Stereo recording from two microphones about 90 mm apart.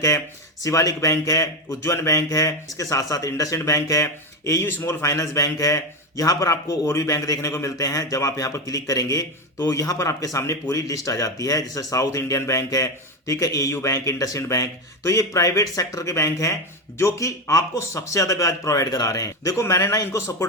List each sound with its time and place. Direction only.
0.6 s speech: 40° left (ahead or behind)
4.6 s speech: 25° left (ahead or behind)